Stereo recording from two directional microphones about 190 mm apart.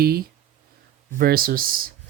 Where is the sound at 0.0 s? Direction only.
50° right (ahead or behind).